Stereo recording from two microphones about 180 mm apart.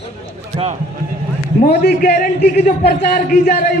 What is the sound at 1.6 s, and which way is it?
A man's voice, 60° left (ahead or behind).